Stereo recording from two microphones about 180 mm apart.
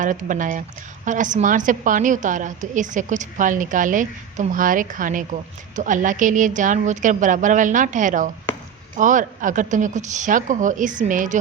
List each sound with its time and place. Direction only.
0.0 s a woman's voice: 45° right (ahead or behind)